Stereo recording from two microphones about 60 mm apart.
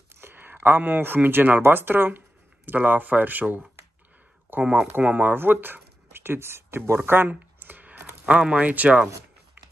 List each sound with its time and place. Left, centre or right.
0.1 s speech: right
7.1 s a sound: right
8.3 s speech: centre